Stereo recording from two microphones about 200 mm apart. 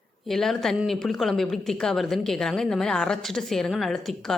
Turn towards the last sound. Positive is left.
turn(degrees=0)  # may be behind; listen again after turning